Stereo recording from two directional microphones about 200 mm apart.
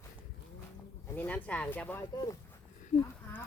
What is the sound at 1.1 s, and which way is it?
Speech, 10° left (ahead or behind).